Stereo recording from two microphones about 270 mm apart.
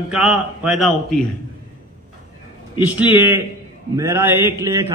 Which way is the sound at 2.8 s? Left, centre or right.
Centre.